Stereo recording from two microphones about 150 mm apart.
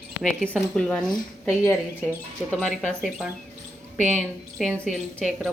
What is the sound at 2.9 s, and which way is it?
Speech, 5° right (ahead or behind).